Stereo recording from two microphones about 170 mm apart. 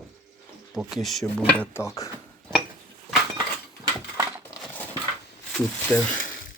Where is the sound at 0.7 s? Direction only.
Centre (ahead or behind); by 2.0 s 15° left (ahead or behind).